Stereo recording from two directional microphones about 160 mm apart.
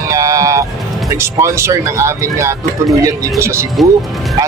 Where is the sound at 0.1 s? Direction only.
20° right (ahead or behind).